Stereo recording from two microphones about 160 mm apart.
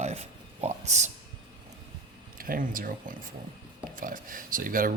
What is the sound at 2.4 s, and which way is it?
Speech, 60° right (ahead or behind).